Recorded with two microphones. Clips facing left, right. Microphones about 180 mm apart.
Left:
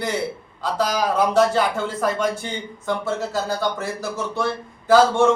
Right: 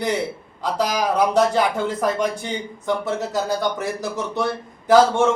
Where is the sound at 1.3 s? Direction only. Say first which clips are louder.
Even; 15° right (ahead or behind).